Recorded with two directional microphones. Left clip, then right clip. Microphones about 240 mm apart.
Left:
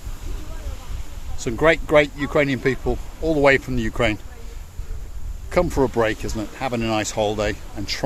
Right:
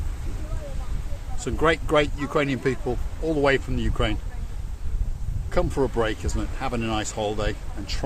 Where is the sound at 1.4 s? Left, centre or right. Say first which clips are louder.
Left 5 dB; left.